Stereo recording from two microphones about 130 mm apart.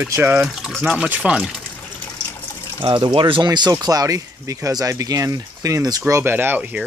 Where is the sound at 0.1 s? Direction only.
15° right (ahead or behind).